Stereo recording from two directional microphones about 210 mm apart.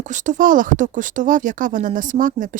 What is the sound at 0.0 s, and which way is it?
A woman's voice, 35° right (ahead or behind).